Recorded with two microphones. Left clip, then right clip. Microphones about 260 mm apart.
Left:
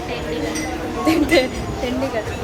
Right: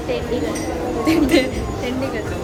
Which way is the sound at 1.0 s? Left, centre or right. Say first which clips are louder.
Left 1 dB; centre.